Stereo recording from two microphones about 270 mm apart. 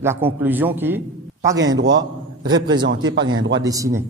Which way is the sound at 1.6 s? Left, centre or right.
Right.